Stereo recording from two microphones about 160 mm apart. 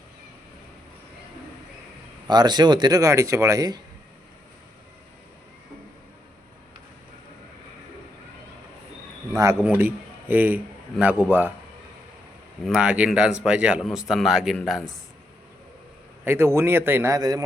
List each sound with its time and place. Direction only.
2.2 s speech: 25° right (ahead or behind)
9.3 s a man's voice: 20° right (ahead or behind)
12.6 s speech: 5° right (ahead or behind)
16.2 s a man's voice: 15° right (ahead or behind)